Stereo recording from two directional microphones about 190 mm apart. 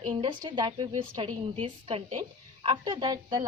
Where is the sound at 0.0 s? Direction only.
25° right (ahead or behind).